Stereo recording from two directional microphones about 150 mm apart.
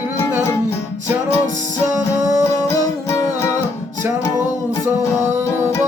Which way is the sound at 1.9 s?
20° right (ahead or behind).